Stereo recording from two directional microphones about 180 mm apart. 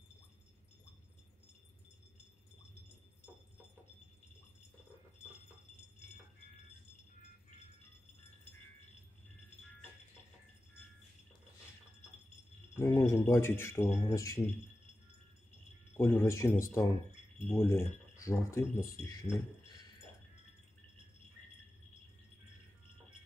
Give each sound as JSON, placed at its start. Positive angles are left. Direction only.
{"t": 12.7, "sound": "speech", "side_deg": 20}
{"t": 16.0, "sound": "speech", "side_deg": 10}